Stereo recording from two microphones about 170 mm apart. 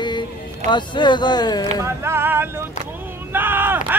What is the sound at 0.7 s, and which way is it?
Speech, 25° left (ahead or behind).